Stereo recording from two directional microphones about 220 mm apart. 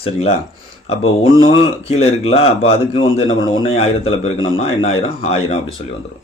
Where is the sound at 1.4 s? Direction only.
25° left (ahead or behind).